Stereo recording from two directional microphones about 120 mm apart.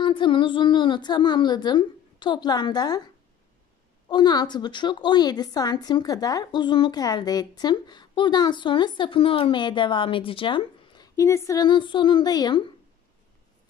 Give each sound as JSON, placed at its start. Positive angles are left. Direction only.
{"t": 0.0, "sound": "a woman's voice", "side_deg": 40}
{"t": 4.1, "sound": "a woman's voice", "side_deg": 35}
{"t": 11.1, "sound": "a woman's voice", "side_deg": 25}